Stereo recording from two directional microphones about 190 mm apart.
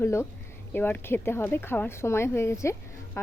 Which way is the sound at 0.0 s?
15° left (ahead or behind).